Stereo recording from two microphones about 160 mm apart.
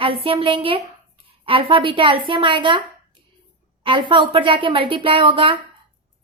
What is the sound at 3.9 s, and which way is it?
A woman's voice, 30° right (ahead or behind).